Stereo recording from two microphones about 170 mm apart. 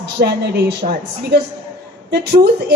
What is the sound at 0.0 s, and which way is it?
A woman's voice, 70° right (ahead or behind).